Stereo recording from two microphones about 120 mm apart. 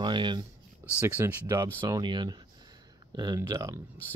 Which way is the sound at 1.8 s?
35° right (ahead or behind).